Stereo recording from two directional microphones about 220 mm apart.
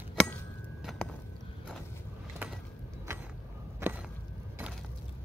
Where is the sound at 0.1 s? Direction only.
5° left (ahead or behind).